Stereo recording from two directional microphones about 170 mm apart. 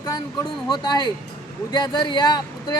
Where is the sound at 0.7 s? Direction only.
25° left (ahead or behind).